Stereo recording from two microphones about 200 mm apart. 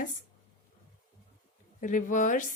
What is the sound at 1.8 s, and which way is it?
Speech, 40° left (ahead or behind).